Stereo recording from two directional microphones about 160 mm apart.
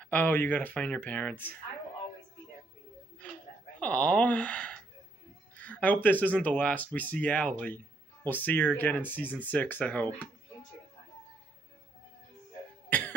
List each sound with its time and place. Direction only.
0.0 s speech: 10° left (ahead or behind)
3.8 s speech: 10° left (ahead or behind)